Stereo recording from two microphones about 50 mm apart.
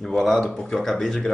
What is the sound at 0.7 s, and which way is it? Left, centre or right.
Speech, centre.